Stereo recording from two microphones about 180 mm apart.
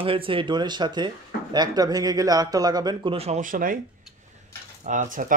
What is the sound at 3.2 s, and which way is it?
Speech, 40° right (ahead or behind).